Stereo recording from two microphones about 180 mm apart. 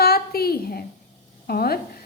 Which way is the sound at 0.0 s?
60° left (ahead or behind).